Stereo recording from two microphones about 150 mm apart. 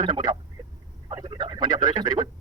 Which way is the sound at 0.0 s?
30° right (ahead or behind).